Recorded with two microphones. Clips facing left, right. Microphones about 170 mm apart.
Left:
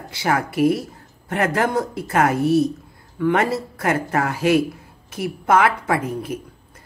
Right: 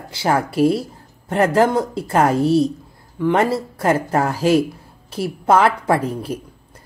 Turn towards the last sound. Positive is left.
turn(degrees=-30)  # may be behind; listen again after turning